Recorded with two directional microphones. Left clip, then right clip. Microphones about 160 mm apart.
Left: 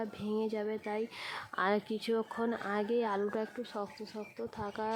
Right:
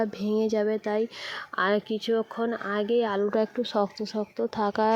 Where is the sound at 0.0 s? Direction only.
35° right (ahead or behind); by 3.3 s 20° right (ahead or behind).